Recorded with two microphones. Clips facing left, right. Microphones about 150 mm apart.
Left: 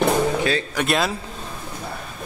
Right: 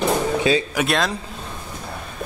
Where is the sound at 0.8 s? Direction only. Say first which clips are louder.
Even; 5° left (ahead or behind).